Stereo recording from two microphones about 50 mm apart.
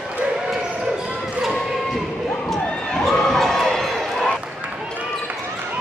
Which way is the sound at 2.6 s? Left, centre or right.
Centre.